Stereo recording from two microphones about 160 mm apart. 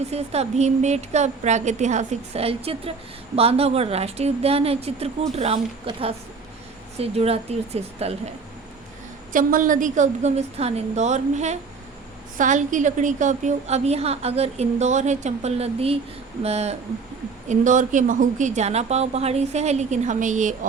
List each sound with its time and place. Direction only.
0.1 s a woman's voice: 40° right (ahead or behind)
9.3 s a woman's voice: 60° right (ahead or behind)